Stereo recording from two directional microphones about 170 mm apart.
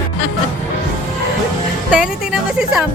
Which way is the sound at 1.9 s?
5° right (ahead or behind).